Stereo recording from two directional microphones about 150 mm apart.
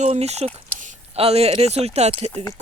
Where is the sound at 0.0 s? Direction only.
45° right (ahead or behind).